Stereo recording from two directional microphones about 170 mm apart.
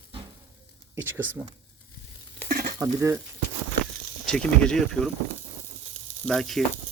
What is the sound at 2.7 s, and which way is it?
Speech, 15° right (ahead or behind).